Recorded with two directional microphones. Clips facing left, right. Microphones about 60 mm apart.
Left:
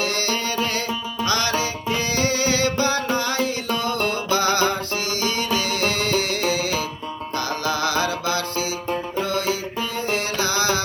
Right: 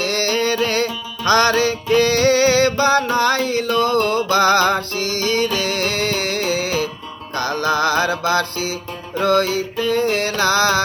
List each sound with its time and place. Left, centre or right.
0.0 s music: right
3.8 s mantra: right
4.1 s music: right